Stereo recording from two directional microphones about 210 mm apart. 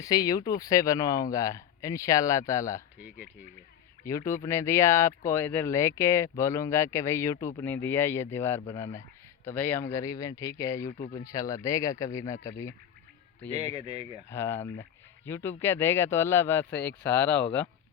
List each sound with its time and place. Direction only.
0.0 s speech: 20° left (ahead or behind)
4.0 s speech: 15° left (ahead or behind)
13.7 s speech: 30° right (ahead or behind)
14.3 s speech: 10° left (ahead or behind)